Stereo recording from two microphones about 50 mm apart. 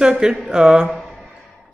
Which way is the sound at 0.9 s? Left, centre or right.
Centre.